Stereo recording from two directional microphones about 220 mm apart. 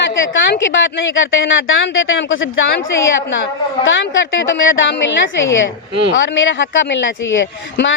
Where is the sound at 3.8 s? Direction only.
60° left (ahead or behind).